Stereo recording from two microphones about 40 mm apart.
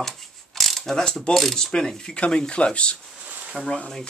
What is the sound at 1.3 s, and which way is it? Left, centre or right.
Speech, centre.